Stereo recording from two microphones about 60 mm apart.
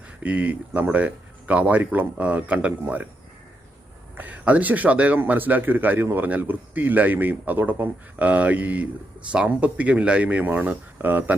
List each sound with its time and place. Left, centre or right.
0.2 s speech: right
4.2 s speech: right